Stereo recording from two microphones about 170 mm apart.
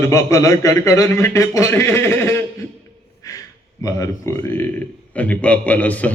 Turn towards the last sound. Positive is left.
turn(degrees=10)  # may be behind; listen again after turning